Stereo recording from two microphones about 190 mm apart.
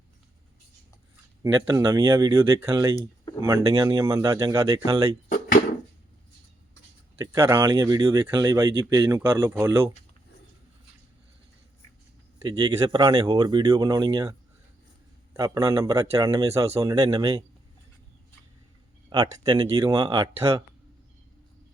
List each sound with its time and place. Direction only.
1.4 s speech: 20° right (ahead or behind)
5.3 s drawer open or close: 45° left (ahead or behind)
7.2 s speech: 15° right (ahead or behind)
12.5 s speech: 25° right (ahead or behind)
19.1 s speech: 20° right (ahead or behind)